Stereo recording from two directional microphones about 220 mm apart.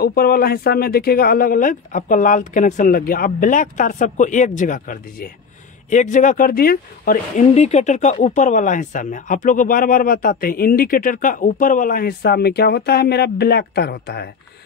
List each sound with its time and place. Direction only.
0.0 s speech: 45° left (ahead or behind)